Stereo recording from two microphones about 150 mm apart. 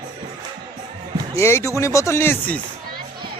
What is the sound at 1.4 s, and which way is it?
Speech, 20° left (ahead or behind).